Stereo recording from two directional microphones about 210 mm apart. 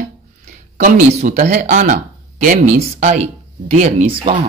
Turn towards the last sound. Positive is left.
turn(degrees=-30)  # may be behind; listen again after turning